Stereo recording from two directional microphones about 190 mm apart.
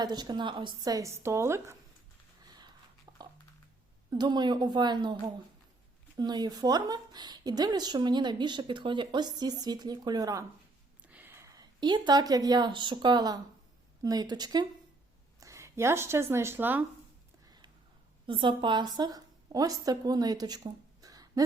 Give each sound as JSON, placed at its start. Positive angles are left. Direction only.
{"t": 0.0, "sound": "speech", "side_deg": -20}
{"t": 2.5, "sound": "a sound", "side_deg": -20}
{"t": 4.1, "sound": "speech", "side_deg": -20}
{"t": 6.1, "sound": "speech", "side_deg": -20}
{"t": 11.0, "sound": "speech", "side_deg": -10}
{"t": 18.3, "sound": "a woman's voice", "side_deg": -25}